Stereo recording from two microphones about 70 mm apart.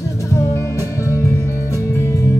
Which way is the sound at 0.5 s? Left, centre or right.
Left.